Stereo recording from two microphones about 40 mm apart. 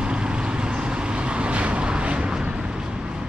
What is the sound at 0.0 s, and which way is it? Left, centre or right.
Vehicle, right.